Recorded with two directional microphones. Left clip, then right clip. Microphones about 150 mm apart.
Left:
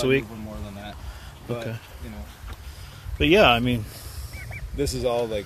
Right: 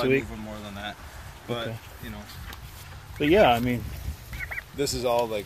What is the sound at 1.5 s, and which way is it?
Speech, 10° left (ahead or behind).